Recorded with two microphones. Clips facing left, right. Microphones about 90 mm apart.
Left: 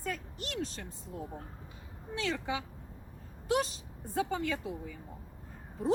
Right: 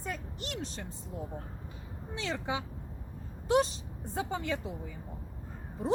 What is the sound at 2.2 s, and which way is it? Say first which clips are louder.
A woman's voice: even; 25° right (ahead or behind).